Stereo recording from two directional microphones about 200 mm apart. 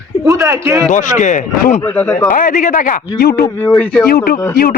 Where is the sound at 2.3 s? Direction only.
40° left (ahead or behind).